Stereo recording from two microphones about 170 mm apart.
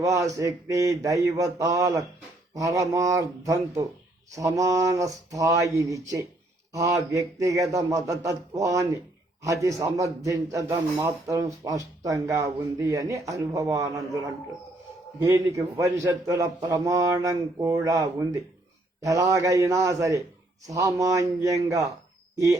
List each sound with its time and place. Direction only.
0.0 s speech: 20° right (ahead or behind)
15.2 s speech: 20° right (ahead or behind)